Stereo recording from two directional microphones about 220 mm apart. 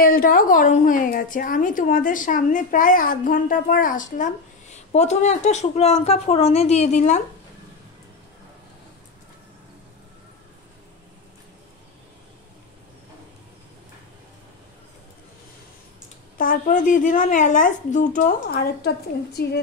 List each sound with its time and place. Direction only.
0.0 s a woman's voice: 40° left (ahead or behind)
16.3 s a woman's voice: 40° left (ahead or behind)